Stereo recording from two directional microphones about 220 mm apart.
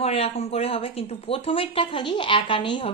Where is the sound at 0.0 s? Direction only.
25° left (ahead or behind).